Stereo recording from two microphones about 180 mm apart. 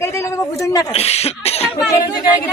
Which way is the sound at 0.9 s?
35° left (ahead or behind).